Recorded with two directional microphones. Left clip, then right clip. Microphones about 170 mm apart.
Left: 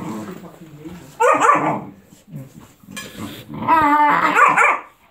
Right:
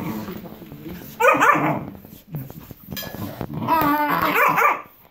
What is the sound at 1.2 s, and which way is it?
Dog, 10° left (ahead or behind).